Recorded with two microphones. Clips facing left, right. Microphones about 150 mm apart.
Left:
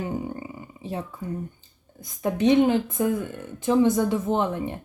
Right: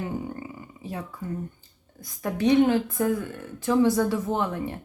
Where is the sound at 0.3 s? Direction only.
20° left (ahead or behind).